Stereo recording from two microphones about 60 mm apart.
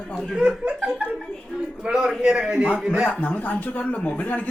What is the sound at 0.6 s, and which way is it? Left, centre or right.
Speech, centre.